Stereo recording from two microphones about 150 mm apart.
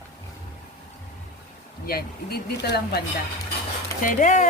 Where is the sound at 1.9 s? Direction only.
90° left.